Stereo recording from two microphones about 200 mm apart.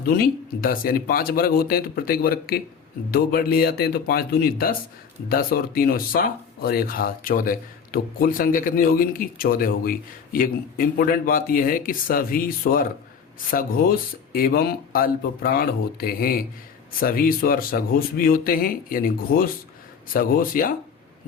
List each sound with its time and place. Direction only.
0.6 s speech: 45° left (ahead or behind)